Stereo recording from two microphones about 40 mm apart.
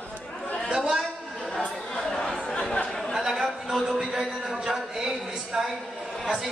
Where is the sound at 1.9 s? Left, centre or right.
Centre.